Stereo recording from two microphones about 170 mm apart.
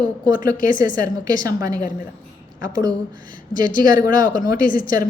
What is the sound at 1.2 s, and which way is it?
Speech, 20° right (ahead or behind).